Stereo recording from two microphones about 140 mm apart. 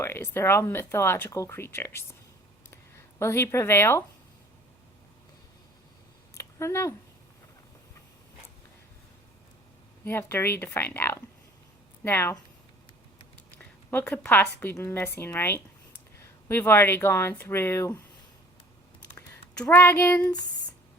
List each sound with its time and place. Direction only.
0.0 s speech: 15° left (ahead or behind)
3.2 s a woman's voice: 20° left (ahead or behind)
6.3 s a sound: 20° left (ahead or behind)
10.0 s speech: 15° left (ahead or behind)
13.6 s speech: 10° left (ahead or behind)
19.6 s speech: 15° left (ahead or behind)